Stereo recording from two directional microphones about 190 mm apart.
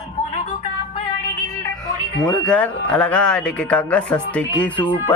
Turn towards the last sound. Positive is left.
turn(degrees=5)  # may be behind; listen again after turning